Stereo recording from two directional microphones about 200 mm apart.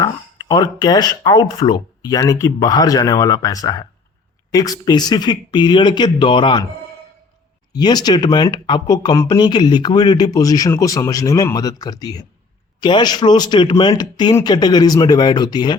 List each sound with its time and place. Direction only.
0.0 s speech: 20° left (ahead or behind)
7.7 s speech: 20° left (ahead or behind)